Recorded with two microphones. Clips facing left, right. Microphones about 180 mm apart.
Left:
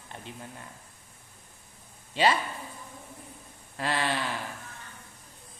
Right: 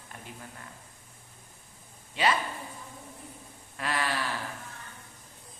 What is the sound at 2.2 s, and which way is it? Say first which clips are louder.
Speech: left 3 dB; 30° left (ahead or behind).